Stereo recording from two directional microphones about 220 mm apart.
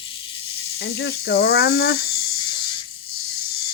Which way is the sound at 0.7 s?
45° left (ahead or behind).